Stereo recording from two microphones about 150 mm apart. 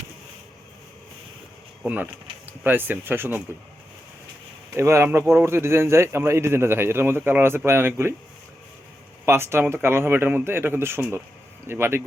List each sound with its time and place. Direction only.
1.8 s a man's voice: 10° right (ahead or behind)
4.7 s a man's voice: 15° right (ahead or behind)
9.2 s a man's voice: 15° right (ahead or behind)